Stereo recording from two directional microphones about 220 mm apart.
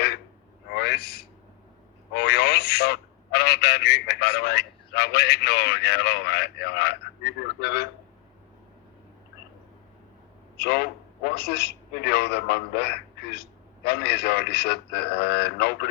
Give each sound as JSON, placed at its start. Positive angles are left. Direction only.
{"t": 0.7, "sound": "a sound", "side_deg": 45}
{"t": 2.1, "sound": "a man's voice", "side_deg": 50}
{"t": 10.6, "sound": "a man's voice", "side_deg": 50}